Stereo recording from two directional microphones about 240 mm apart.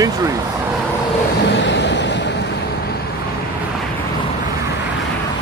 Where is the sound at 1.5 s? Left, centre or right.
Left.